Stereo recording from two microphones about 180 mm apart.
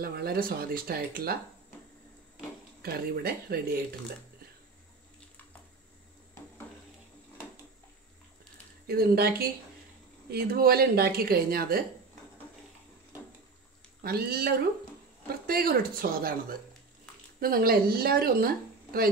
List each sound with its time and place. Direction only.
0.0 s a woman's voice: 60° right (ahead or behind)
2.8 s a woman's voice: 60° right (ahead or behind)
8.8 s a woman's voice: 60° right (ahead or behind)
14.0 s a woman's voice: 60° right (ahead or behind)